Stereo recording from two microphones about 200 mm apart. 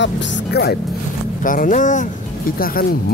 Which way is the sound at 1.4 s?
40° left (ahead or behind).